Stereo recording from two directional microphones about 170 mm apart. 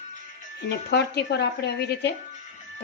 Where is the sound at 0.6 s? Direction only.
80° left.